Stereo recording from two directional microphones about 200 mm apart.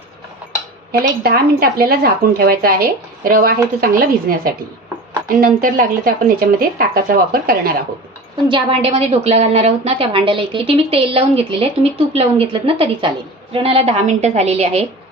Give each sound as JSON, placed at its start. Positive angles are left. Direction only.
{"t": 1.2, "sound": "speech", "side_deg": -50}
{"t": 8.4, "sound": "a woman's voice", "side_deg": -25}